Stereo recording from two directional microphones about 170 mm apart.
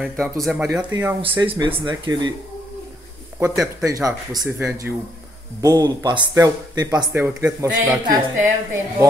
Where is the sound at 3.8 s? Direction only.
20° right (ahead or behind).